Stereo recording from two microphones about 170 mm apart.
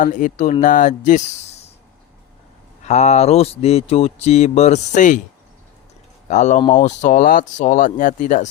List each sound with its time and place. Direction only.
0.0 s speech: 50° left (ahead or behind)
2.8 s speech: 40° left (ahead or behind)
6.2 s speech: 45° left (ahead or behind)